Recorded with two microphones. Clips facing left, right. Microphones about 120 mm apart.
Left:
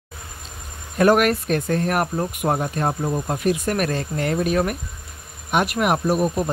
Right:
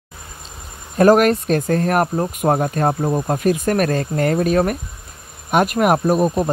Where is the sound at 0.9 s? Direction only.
35° right (ahead or behind).